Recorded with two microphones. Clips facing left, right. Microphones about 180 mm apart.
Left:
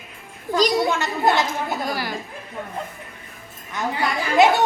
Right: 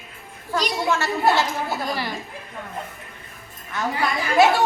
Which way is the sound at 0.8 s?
20° left (ahead or behind).